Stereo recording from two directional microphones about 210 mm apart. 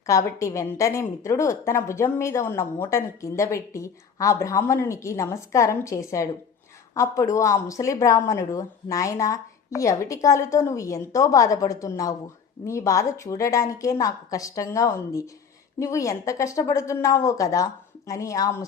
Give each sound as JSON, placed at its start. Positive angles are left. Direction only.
{"t": 0.0, "sound": "a woman's voice", "side_deg": 15}